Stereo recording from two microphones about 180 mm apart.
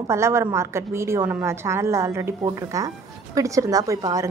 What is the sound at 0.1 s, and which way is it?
A woman's voice, 15° right (ahead or behind).